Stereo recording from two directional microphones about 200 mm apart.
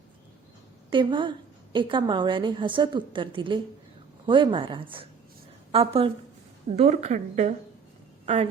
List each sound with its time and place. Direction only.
0.9 s a woman's voice: 25° right (ahead or behind)